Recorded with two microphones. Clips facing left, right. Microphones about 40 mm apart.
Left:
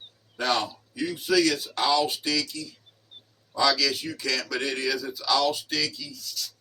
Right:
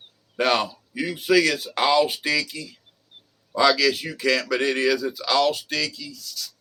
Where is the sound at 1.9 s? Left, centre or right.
Right.